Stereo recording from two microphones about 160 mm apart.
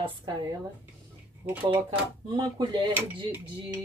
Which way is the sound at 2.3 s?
30° right (ahead or behind).